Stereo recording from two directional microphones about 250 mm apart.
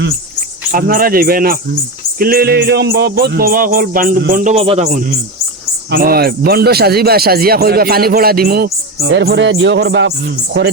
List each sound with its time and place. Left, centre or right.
0.7 s speech: right